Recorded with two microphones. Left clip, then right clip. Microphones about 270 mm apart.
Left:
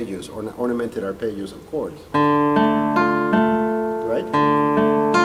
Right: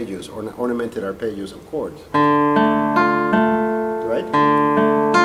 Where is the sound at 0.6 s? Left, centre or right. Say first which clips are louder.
Right 1 dB; centre.